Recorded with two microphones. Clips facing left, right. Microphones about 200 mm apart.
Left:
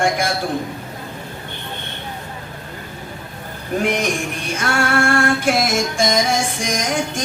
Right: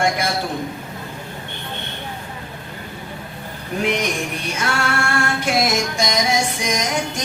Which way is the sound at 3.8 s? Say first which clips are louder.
Even; 50° left (ahead or behind).